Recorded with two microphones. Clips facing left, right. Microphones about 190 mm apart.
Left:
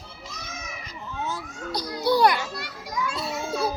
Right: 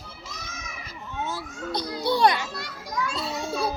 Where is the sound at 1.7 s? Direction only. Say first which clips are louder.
Left 2 dB; 25° right (ahead or behind).